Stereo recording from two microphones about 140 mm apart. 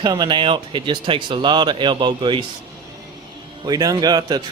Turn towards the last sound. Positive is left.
turn(degrees=-30)  # may be behind; listen again after turning